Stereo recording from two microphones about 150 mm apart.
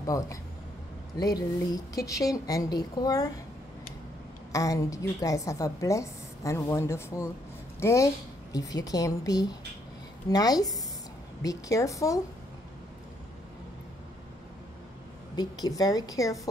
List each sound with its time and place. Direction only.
0.0 s a woman's voice: 25° left (ahead or behind)
4.5 s a woman's voice: 20° left (ahead or behind)
15.3 s a woman's voice: 25° left (ahead or behind)